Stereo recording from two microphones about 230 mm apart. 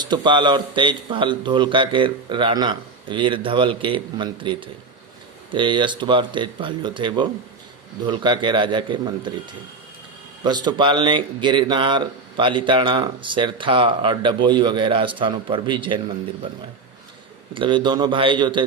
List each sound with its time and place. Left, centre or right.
0.0 s speech: centre
10.4 s speech: centre
17.5 s speech: right